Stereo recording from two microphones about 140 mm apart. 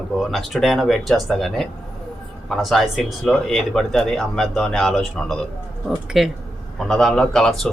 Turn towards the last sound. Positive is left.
turn(degrees=5)  # may be behind; listen again after turning